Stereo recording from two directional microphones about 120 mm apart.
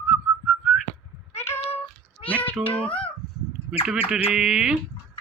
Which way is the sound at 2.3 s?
15° left (ahead or behind).